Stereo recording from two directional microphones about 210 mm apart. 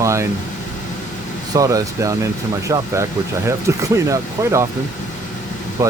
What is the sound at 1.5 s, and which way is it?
Speech, 15° right (ahead or behind).